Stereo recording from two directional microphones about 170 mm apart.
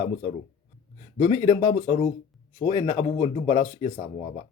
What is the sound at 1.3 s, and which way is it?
Speech, 25° left (ahead or behind).